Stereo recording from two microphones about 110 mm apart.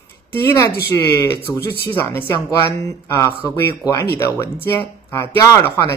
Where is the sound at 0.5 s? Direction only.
25° left (ahead or behind).